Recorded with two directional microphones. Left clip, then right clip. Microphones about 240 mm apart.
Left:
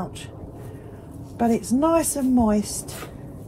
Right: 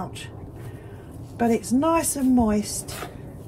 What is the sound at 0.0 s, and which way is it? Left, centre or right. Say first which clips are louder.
Speech: even; centre.